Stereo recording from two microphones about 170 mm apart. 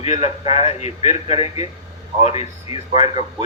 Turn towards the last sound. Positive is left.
turn(degrees=35)  # may be behind; listen again after turning